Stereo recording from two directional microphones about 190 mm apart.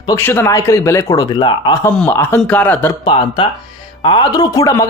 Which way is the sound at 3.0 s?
25° left (ahead or behind).